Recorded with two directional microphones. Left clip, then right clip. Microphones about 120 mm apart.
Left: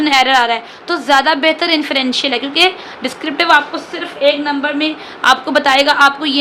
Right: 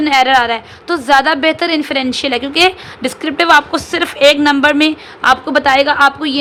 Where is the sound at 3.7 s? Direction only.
90° right.